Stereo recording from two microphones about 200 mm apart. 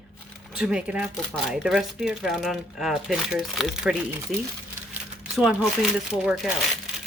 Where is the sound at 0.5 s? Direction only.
5° right (ahead or behind).